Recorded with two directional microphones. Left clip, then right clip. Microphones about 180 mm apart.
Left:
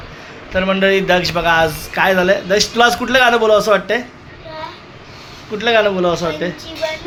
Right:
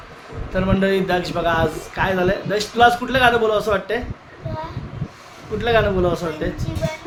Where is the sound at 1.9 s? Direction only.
30° left (ahead or behind).